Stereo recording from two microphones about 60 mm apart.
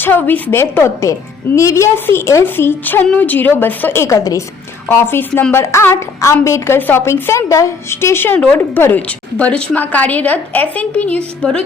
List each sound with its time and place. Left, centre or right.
0.0 s a woman's voice: left
0.5 s a woman's voice: left
1.5 s a woman's voice: left
2.4 s a woman's voice: left
3.9 s a woman's voice: left
4.9 s a woman's voice: left
5.3 s a woman's voice: left
5.5 s a woman's voice: left
6.1 s a woman's voice: left
6.7 s a woman's voice: left
7.0 s a woman's voice: left
7.9 s a woman's voice: left
9.0 s a woman's voice: left